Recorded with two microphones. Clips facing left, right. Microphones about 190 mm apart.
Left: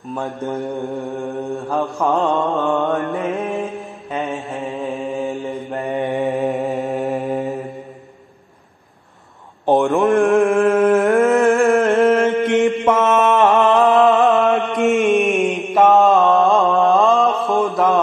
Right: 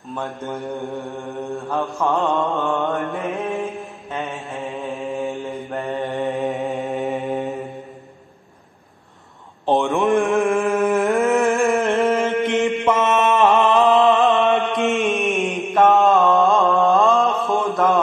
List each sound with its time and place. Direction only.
0.7 s mantra: centre (ahead or behind)
5.9 s mantra: 15° left (ahead or behind)
9.7 s a sound: centre (ahead or behind)
11.8 s chant: 5° left (ahead or behind)
12.1 s mantra: centre (ahead or behind)